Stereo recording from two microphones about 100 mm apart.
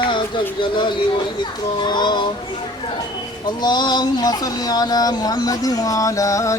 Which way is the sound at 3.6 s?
45° left (ahead or behind).